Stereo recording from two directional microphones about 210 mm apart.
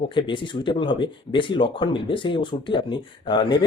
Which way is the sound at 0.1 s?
25° left (ahead or behind).